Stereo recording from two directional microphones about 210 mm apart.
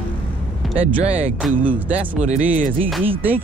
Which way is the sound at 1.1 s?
5° right (ahead or behind).